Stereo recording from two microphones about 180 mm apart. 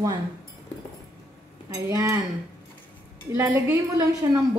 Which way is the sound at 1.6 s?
20° right (ahead or behind).